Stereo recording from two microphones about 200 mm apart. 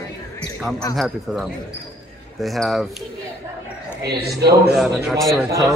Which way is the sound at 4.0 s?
55° right (ahead or behind).